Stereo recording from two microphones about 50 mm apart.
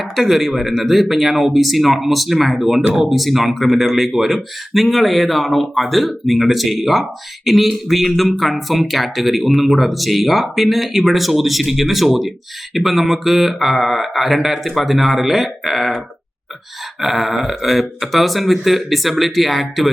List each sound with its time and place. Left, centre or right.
0.0 s speech: centre
17.0 s speech: centre